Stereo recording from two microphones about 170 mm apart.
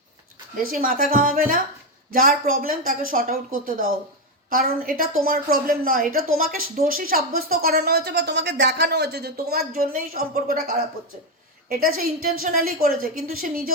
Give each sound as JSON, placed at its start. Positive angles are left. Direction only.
{"t": 0.5, "sound": "a woman's voice", "side_deg": -55}
{"t": 11.7, "sound": "a woman's voice", "side_deg": -60}